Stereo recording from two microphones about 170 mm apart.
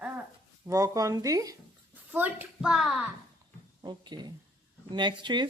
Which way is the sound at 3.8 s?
25° right (ahead or behind).